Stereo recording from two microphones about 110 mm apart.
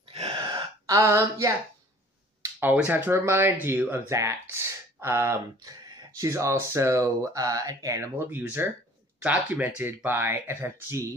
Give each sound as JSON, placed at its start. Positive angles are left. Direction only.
{"t": 0.1, "sound": "gasp", "side_deg": -55}
{"t": 0.8, "sound": "speech", "side_deg": -25}
{"t": 2.6, "sound": "speech", "side_deg": -15}
{"t": 8.3, "sound": "speech", "side_deg": -15}